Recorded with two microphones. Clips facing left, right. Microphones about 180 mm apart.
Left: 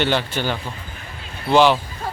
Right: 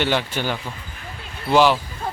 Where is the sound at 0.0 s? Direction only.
10° right (ahead or behind).